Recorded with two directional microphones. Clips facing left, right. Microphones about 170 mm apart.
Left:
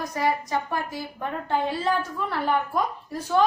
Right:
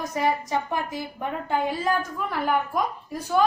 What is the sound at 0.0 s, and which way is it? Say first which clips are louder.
A woman's voice: right 1 dB; 20° right (ahead or behind).